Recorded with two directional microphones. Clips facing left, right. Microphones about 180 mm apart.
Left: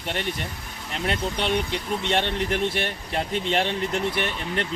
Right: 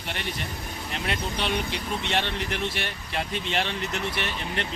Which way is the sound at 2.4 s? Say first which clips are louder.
Left 5 dB; 45° left (ahead or behind).